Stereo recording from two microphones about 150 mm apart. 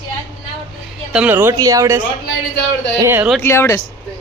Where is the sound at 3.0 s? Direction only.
15° right (ahead or behind).